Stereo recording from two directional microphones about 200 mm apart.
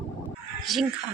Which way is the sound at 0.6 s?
Centre (ahead or behind).